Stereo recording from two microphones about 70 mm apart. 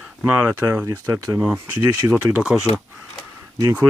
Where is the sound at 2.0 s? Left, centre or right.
Right.